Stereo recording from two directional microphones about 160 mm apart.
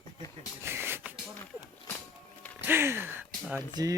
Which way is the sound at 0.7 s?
15° right (ahead or behind).